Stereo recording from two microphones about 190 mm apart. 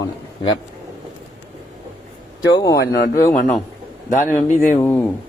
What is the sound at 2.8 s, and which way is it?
Speech, 55° left (ahead or behind).